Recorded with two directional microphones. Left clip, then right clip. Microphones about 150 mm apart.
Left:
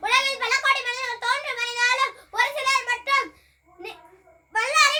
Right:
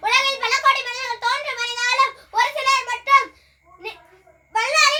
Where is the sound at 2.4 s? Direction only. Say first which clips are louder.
Right 4 dB; 15° left (ahead or behind).